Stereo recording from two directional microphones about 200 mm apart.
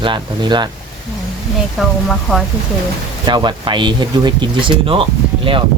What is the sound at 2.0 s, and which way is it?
Speech, centre (ahead or behind).